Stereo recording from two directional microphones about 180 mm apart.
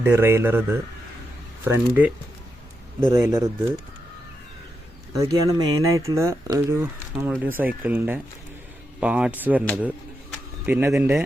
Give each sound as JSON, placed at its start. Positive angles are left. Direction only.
{"t": 0.0, "sound": "speech", "side_deg": -15}
{"t": 5.5, "sound": "speech", "side_deg": -15}
{"t": 10.7, "sound": "speech", "side_deg": -15}